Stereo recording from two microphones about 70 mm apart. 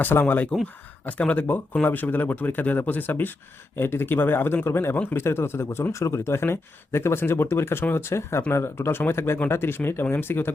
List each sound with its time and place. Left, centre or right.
0.0 s speech: left